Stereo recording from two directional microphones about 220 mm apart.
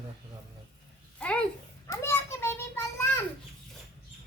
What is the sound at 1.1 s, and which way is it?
Children playing, 5° left (ahead or behind).